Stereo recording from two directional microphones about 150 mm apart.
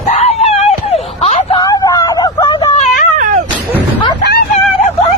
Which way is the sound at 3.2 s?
65° right (ahead or behind).